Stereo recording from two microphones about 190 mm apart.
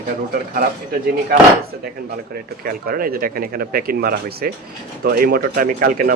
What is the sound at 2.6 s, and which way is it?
Speech, 50° right (ahead or behind).